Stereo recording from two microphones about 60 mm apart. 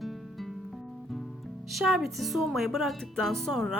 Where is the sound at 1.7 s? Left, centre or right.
Centre.